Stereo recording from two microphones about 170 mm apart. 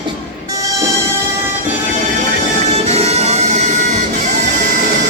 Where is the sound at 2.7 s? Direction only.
40° right (ahead or behind).